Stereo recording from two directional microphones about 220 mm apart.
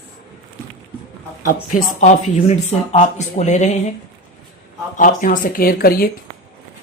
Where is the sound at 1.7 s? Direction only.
30° left (ahead or behind).